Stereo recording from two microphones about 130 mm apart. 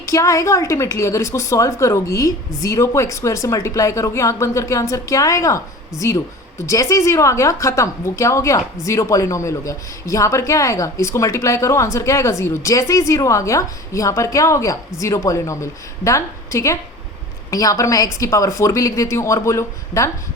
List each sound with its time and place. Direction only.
0.0 s a woman's voice: 25° left (ahead or behind)